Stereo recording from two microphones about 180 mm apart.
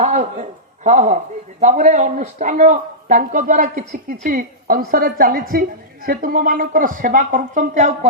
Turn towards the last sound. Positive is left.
turn(degrees=-40)  # may be behind; listen again after turning